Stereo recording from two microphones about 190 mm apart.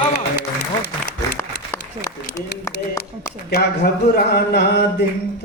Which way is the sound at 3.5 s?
60° left (ahead or behind).